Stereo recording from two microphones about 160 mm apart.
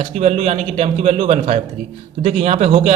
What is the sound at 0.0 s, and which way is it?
A man's voice, 45° right (ahead or behind).